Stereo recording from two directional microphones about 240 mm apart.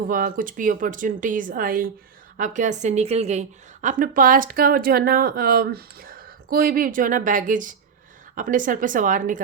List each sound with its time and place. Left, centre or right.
0.1 s a woman's voice: right